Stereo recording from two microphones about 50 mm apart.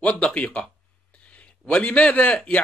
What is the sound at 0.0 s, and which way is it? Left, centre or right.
Speech, left.